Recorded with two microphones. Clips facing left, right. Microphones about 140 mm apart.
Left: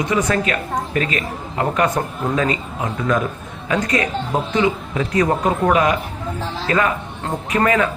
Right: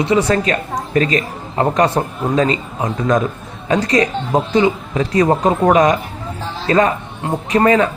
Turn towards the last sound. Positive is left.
turn(degrees=-30)  # may be behind; listen again after turning